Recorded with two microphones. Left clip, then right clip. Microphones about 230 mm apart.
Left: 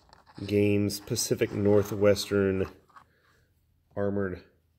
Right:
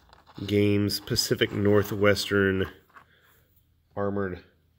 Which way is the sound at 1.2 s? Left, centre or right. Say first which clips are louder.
Even; centre.